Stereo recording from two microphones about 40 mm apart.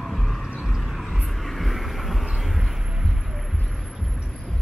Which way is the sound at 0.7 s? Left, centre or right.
Centre.